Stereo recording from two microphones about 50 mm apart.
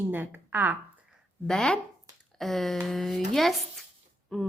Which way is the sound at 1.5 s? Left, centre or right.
Centre.